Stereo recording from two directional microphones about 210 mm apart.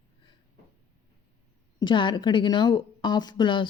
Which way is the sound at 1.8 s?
20° left (ahead or behind).